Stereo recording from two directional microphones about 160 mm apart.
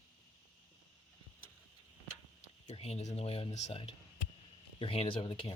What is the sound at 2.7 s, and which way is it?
Speech, 40° left (ahead or behind).